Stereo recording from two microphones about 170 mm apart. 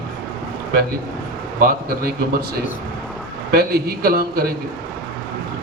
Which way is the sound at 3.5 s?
65° right (ahead or behind).